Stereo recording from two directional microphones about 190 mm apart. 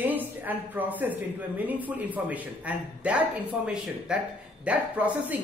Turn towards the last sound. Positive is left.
turn(degrees=-5)  # may be behind; listen again after turning